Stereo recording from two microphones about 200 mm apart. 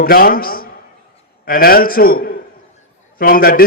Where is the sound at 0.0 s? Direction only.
45° left (ahead or behind).